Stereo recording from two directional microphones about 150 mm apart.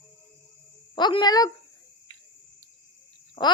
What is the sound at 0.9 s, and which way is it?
Speech, 30° left (ahead or behind).